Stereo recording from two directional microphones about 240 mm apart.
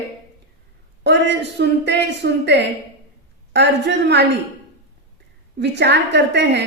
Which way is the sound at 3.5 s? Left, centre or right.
Right.